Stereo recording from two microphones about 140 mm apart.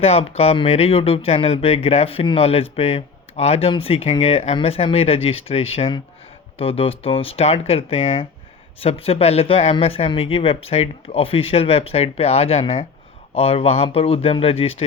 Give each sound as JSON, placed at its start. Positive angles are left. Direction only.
{"t": 0.0, "sound": "speech", "side_deg": 45}